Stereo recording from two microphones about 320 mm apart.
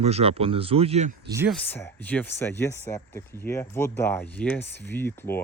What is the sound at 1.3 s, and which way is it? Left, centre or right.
Speech, centre.